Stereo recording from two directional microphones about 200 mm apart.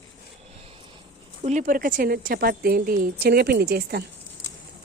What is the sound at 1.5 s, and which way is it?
A woman's voice, 40° right (ahead or behind).